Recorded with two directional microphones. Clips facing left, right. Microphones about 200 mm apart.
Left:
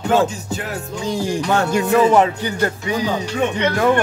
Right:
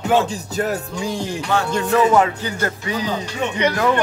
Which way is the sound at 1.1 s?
10° left (ahead or behind).